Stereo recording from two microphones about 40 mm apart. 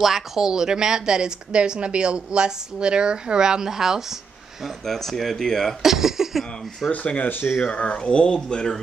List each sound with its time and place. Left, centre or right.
0.0 s a woman's voice: centre
4.8 s speech: centre
5.8 s a sound: centre
7.2 s speech: left
7.7 s speech: left